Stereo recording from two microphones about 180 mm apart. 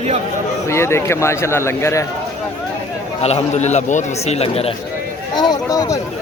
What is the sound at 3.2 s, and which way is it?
A man's voice, 35° left (ahead or behind).